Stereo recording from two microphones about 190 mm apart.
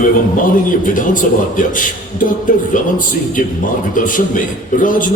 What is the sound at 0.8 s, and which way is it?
Speech, 45° left (ahead or behind).